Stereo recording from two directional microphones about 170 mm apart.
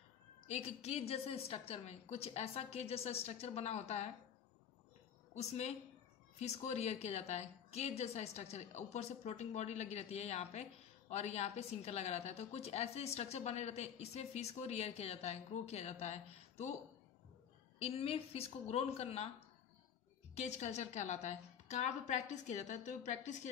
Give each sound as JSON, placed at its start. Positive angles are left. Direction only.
{"t": 0.5, "sound": "a woman's voice", "side_deg": 35}
{"t": 5.3, "sound": "a woman's voice", "side_deg": 40}
{"t": 17.7, "sound": "a woman's voice", "side_deg": 35}
{"t": 20.3, "sound": "a woman's voice", "side_deg": 40}